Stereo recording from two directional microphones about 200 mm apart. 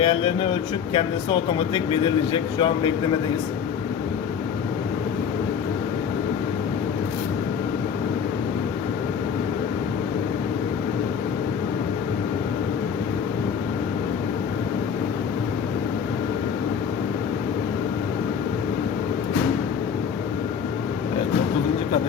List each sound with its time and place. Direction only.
0.0 s speech: 25° left (ahead or behind)